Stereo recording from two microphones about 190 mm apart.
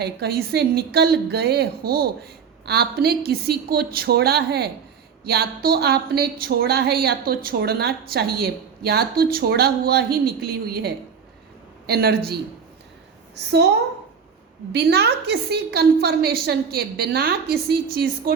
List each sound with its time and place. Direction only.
0.0 s a woman's voice: 55° right (ahead or behind)
14.7 s a woman's voice: 60° right (ahead or behind)